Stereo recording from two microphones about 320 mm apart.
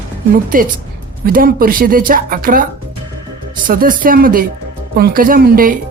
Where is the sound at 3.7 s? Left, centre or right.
Right.